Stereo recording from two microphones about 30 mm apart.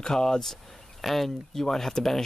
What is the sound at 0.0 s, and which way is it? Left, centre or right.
Speech, left.